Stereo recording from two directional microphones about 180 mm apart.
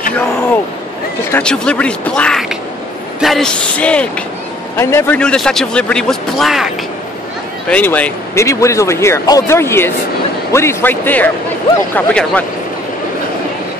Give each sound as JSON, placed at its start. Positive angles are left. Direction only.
{"t": 1.3, "sound": "a man's voice", "side_deg": 5}
{"t": 7.7, "sound": "speech", "side_deg": 10}